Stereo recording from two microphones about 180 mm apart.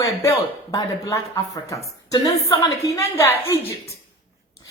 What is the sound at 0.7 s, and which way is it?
A woman's voice, 20° left (ahead or behind).